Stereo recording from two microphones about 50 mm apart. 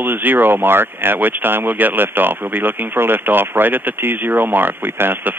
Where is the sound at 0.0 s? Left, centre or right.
Right.